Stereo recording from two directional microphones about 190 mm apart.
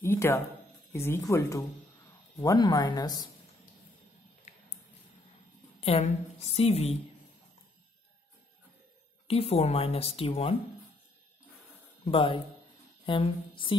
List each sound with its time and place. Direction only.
0.0 s speech: 15° left (ahead or behind)
4.5 s a sound: 40° left (ahead or behind)
5.8 s a woman's voice: 35° left (ahead or behind)
9.3 s a woman's voice: 35° left (ahead or behind)
12.0 s speech: 25° left (ahead or behind)
13.1 s a sound: 25° left (ahead or behind)
13.7 s speech: 25° left (ahead or behind)